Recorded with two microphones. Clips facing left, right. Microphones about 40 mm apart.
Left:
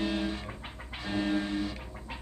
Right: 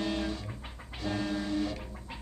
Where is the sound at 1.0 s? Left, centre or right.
Left.